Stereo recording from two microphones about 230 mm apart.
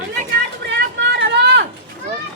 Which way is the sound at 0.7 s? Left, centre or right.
Right.